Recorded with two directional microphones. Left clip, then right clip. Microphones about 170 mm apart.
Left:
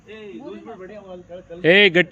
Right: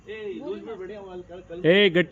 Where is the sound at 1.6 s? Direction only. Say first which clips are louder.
Left 5 dB; 10° left (ahead or behind).